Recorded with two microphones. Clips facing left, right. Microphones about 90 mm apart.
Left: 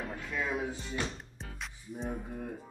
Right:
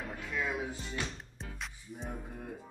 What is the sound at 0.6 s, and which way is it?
Music, centre (ahead or behind).